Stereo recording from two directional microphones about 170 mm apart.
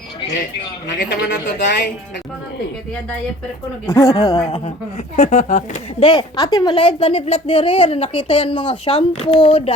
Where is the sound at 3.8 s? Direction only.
15° left (ahead or behind).